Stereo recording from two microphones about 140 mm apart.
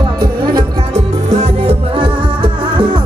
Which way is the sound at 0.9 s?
50° right (ahead or behind).